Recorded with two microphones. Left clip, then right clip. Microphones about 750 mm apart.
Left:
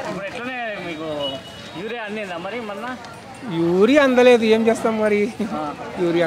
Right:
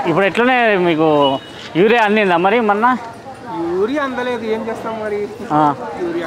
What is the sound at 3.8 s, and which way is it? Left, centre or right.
Speech, left.